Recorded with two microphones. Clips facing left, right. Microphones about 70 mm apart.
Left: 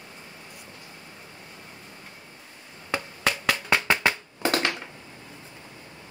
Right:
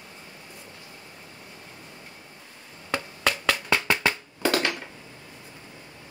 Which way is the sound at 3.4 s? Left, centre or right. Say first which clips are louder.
Even; left.